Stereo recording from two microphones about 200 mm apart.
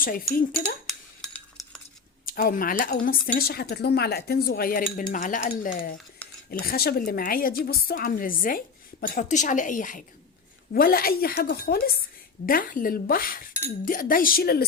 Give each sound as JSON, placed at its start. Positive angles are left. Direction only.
{"t": 0.0, "sound": "speech", "side_deg": 45}
{"t": 0.9, "sound": "cutlery", "side_deg": 0}
{"t": 2.2, "sound": "speech", "side_deg": 45}